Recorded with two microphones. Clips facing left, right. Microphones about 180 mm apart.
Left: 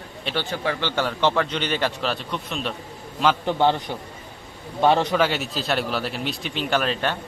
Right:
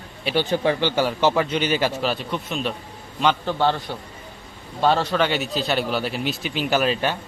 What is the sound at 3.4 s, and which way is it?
A man's voice, 15° left (ahead or behind).